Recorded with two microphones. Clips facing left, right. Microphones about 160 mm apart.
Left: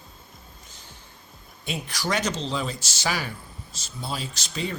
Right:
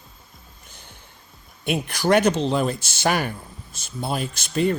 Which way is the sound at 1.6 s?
55° right (ahead or behind).